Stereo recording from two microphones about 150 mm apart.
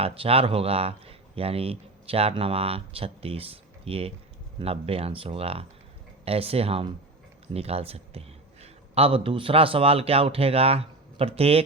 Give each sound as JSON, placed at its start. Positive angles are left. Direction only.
{"t": 0.0, "sound": "speech", "side_deg": -40}